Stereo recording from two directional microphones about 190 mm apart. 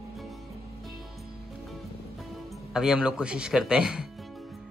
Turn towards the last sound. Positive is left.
turn(degrees=-5)  # may be behind; listen again after turning